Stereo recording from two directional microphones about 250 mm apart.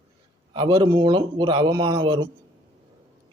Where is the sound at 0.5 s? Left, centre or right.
Centre.